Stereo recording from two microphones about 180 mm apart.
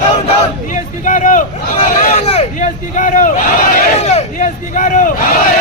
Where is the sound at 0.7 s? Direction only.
45° left (ahead or behind).